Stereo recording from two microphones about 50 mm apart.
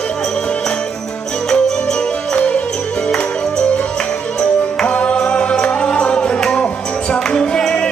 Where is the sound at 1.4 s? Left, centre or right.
Centre.